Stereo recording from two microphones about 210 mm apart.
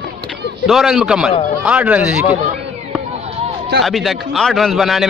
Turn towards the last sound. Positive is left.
turn(degrees=0)  # may be behind; listen again after turning